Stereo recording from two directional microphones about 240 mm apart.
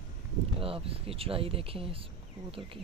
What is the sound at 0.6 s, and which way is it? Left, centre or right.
Speech, right.